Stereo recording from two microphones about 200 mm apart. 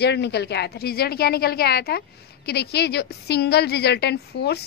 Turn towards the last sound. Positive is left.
turn(degrees=55)  # may be behind; listen again after turning